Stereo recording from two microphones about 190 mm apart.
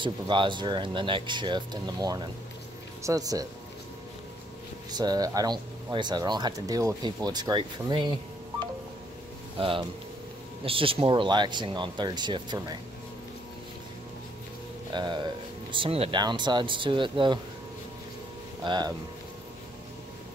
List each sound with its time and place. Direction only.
0.0 s speech: 25° right (ahead or behind)
4.9 s speech: 20° right (ahead or behind)
14.9 s speech: 25° right (ahead or behind)
18.6 s speech: 25° right (ahead or behind)